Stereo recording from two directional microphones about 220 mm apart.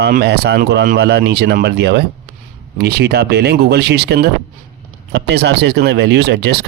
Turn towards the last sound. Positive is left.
turn(degrees=-50)  # may be behind; listen again after turning